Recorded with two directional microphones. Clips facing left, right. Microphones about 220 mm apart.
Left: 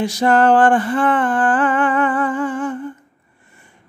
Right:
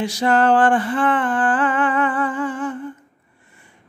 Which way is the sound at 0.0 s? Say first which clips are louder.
Left 3 dB; 45° left (ahead or behind).